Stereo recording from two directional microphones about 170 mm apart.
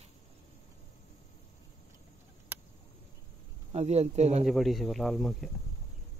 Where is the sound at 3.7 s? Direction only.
40° right (ahead or behind).